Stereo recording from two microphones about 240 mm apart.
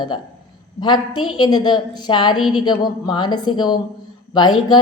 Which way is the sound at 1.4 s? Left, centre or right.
Centre.